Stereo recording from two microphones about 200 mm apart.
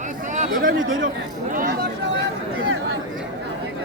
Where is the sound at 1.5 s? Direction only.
50° right (ahead or behind).